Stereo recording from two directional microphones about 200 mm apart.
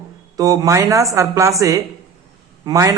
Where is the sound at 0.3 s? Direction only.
15° right (ahead or behind).